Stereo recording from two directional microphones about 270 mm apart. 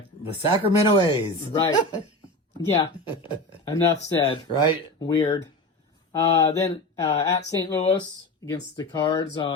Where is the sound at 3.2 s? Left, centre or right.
Centre.